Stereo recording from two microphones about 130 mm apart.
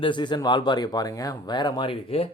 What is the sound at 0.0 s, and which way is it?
Speech, 35° left (ahead or behind).